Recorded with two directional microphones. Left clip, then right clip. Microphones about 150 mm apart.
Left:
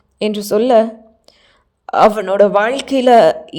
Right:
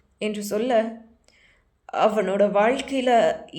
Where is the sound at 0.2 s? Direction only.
50° left (ahead or behind).